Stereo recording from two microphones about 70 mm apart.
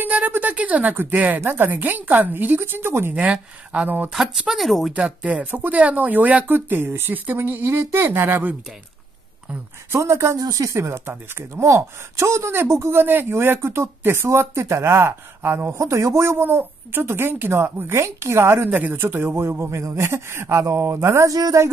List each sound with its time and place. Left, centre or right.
0.0 s speech: right
3.2 s speech: centre
4.1 s speech: centre
4.9 s speech: centre
9.9 s speech: right
10.3 s speech: right
21.3 s a woman's voice: right